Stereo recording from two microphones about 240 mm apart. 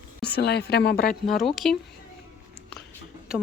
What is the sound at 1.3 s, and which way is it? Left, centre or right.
Speech, centre.